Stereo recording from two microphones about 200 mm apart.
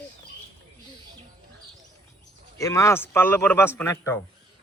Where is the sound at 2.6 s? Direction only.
15° left (ahead or behind).